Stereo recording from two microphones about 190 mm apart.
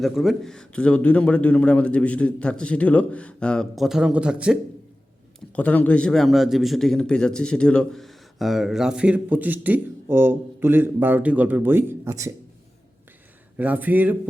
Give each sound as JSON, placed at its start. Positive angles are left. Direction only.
{"t": 0.0, "sound": "a man's voice", "side_deg": 0}
{"t": 5.5, "sound": "a man's voice", "side_deg": 10}
{"t": 13.6, "sound": "speech", "side_deg": -10}